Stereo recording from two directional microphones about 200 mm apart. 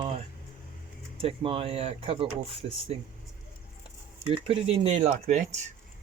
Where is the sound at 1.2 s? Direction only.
30° right (ahead or behind).